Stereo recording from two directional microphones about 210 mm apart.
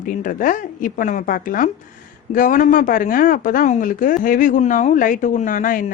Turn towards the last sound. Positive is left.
turn(degrees=40)  # may be behind; listen again after turning